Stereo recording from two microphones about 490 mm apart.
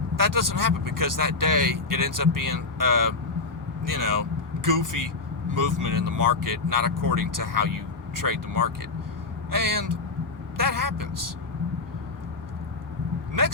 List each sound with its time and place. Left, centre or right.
0.2 s speech: right